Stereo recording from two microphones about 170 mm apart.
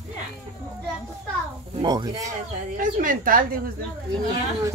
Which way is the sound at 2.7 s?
50° right (ahead or behind).